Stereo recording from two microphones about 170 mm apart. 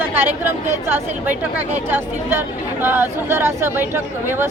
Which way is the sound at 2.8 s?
10° right (ahead or behind).